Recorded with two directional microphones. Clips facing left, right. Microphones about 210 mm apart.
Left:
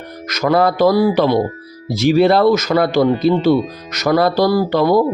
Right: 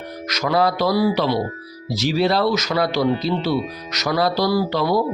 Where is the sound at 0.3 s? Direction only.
50° left (ahead or behind).